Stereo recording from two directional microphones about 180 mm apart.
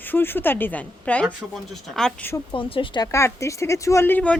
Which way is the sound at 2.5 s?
30° left (ahead or behind).